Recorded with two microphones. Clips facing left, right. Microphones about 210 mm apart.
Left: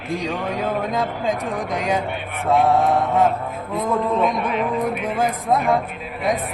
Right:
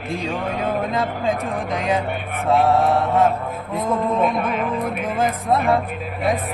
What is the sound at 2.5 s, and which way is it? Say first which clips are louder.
Mantra: even; centre (ahead or behind).